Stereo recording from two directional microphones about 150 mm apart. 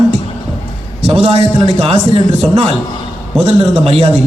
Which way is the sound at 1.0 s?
40° right (ahead or behind).